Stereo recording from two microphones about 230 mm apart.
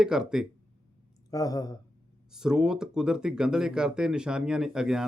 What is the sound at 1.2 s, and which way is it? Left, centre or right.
Speech, centre.